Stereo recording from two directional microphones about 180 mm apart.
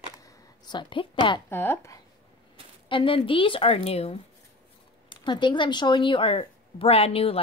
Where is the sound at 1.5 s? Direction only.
10° left (ahead or behind).